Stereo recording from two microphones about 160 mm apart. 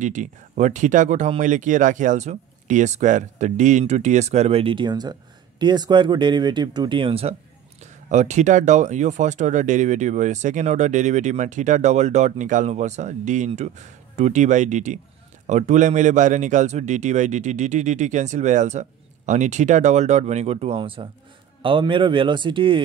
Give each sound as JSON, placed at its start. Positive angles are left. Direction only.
{"t": 0.0, "sound": "speech", "side_deg": -50}
{"t": 7.8, "sound": "speech", "side_deg": -45}